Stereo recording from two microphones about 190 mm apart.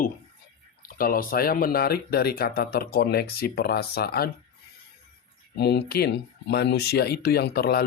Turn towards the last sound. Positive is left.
turn(degrees=55)  # may be behind; listen again after turning